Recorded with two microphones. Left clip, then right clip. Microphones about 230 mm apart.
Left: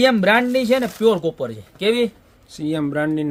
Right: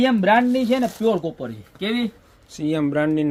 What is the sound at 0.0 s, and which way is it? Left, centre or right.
Speech, left.